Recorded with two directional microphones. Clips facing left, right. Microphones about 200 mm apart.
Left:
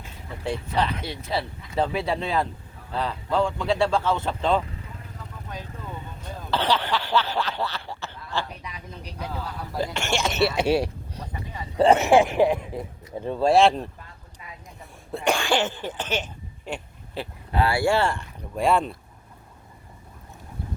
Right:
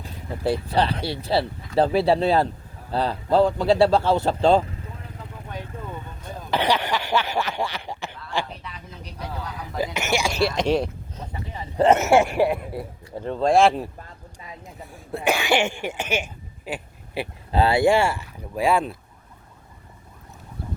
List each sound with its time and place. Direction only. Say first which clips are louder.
0.0 s speech: right 6 dB; 35° right (ahead or behind)
6.5 s speech: right 2 dB; 15° right (ahead or behind)
9.6 s speech: right 2 dB; 5° right (ahead or behind)
12.0 s speech: even; centre (ahead or behind)
13.1 s speech: even; 15° left (ahead or behind); by 13.9 s 5° right (ahead or behind)
15.1 s speech: right 2 dB; 5° right (ahead or behind)
17.5 s speech: right 4 dB; 25° right (ahead or behind); by 18.9 s centre (ahead or behind)